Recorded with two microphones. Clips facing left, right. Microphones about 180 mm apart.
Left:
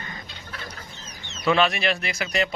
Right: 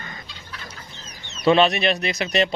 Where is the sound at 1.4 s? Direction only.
25° right (ahead or behind).